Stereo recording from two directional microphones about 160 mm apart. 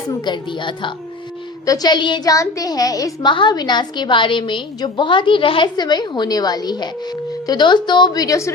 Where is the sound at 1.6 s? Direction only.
25° left (ahead or behind).